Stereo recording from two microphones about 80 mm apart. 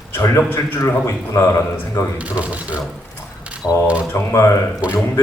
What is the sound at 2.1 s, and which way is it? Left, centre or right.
Speech, centre.